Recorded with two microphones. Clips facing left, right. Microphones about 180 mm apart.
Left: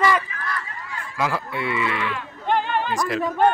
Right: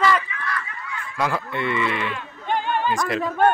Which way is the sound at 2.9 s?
Centre (ahead or behind).